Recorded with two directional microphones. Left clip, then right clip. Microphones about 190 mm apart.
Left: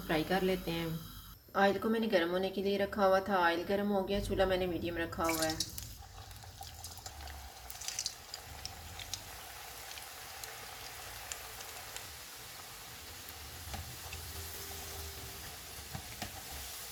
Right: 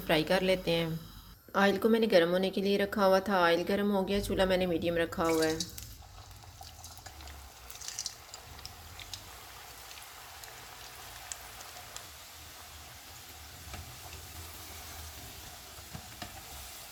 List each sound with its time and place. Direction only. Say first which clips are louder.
0.1 s a woman's voice: right 5 dB; 50° right (ahead or behind)